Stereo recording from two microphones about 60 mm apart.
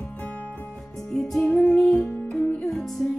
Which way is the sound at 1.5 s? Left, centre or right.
Left.